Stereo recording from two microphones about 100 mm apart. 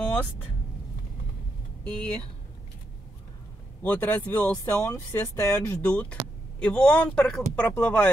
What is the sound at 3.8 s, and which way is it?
Speech, 15° left (ahead or behind).